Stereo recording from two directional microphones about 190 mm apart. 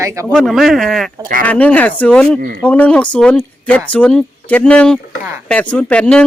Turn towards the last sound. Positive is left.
turn(degrees=5)  # may be behind; listen again after turning